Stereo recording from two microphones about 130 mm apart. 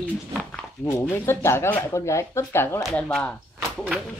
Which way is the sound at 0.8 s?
15° left (ahead or behind).